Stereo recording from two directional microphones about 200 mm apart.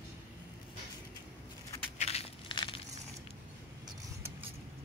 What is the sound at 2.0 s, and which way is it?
Crushing, 30° left (ahead or behind).